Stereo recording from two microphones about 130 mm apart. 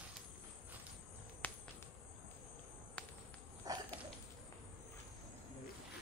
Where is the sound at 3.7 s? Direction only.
30° right (ahead or behind).